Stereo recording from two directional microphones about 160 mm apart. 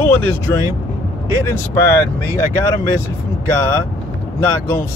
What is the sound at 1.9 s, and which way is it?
Speech, 20° left (ahead or behind).